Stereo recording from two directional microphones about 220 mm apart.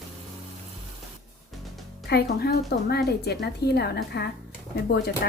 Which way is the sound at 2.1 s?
45° left (ahead or behind).